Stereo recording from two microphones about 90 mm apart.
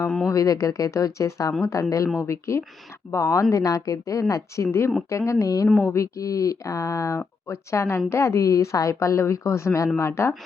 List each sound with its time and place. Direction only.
0.3 s a woman's voice: 40° left (ahead or behind)